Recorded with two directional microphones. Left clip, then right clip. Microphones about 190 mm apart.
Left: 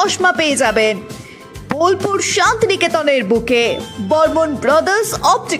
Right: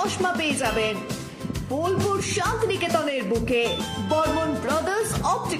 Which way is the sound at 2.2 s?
40° left (ahead or behind).